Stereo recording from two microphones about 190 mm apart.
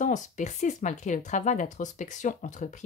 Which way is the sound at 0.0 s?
40° left (ahead or behind).